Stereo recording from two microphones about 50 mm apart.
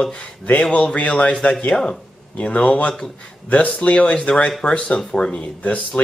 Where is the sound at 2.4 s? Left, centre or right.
Left.